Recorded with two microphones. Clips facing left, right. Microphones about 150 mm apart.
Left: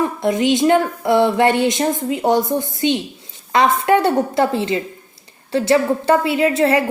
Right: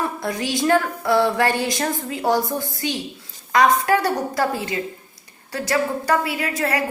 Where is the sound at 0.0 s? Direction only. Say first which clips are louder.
Left 7 dB; 20° left (ahead or behind).